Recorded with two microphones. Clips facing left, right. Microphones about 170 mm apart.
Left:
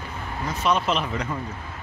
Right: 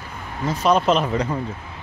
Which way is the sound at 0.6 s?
40° right (ahead or behind).